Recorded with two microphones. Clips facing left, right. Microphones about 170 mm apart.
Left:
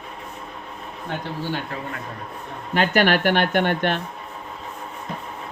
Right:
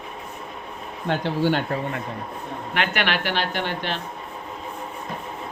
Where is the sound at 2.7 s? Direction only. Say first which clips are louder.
Left 6 dB; 40° left (ahead or behind); by 4.0 s 55° left (ahead or behind).